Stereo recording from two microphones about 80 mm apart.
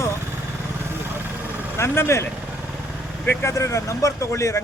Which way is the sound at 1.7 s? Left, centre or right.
Left.